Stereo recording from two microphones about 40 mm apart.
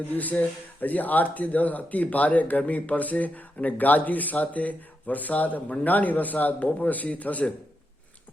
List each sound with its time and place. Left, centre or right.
0.1 s speech: left